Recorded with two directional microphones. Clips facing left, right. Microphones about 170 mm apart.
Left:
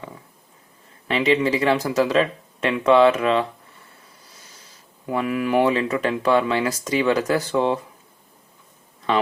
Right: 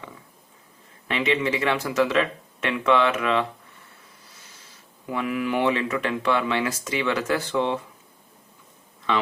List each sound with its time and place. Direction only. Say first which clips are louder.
1.0 s speech: left 4 dB; 35° left (ahead or behind)
5.1 s speech: left 5 dB; 45° left (ahead or behind)